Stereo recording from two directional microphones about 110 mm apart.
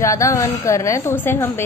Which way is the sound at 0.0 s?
30° left (ahead or behind).